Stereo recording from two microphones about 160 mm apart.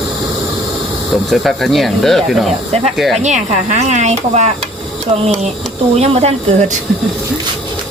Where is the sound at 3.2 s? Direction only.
45° right (ahead or behind).